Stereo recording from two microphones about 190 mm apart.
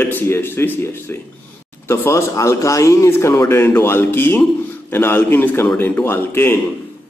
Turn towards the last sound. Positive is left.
turn(degrees=10)  # may be behind; listen again after turning